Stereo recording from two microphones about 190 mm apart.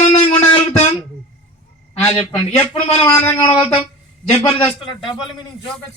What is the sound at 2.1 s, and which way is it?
Speech, 30° left (ahead or behind).